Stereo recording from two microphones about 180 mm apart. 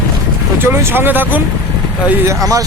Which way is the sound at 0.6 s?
15° right (ahead or behind).